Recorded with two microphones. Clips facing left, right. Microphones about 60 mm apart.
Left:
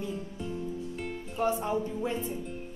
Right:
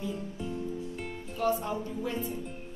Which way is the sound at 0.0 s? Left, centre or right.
Centre.